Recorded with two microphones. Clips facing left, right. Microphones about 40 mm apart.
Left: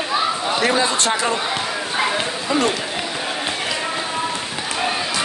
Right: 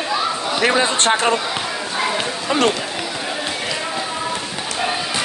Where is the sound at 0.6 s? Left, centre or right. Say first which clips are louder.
Right 3 dB; right.